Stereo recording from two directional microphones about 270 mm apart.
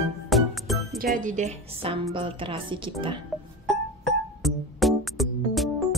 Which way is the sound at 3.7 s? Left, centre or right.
Centre.